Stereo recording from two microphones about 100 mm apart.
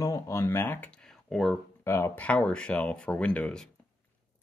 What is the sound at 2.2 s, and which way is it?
Speech, 10° left (ahead or behind).